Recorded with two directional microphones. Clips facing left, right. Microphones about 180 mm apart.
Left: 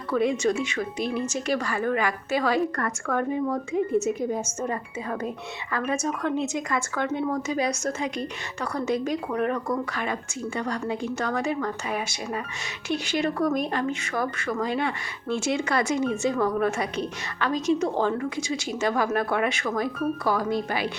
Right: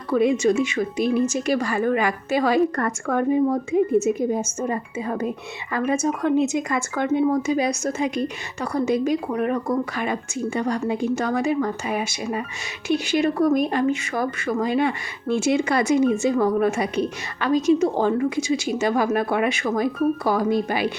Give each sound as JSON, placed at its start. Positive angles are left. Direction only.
{"t": 0.2, "sound": "speech", "side_deg": -10}
{"t": 1.5, "sound": "speech", "side_deg": -20}